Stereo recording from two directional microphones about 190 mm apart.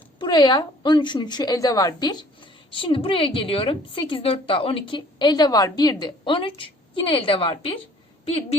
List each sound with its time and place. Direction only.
0.2 s a woman's voice: 20° left (ahead or behind)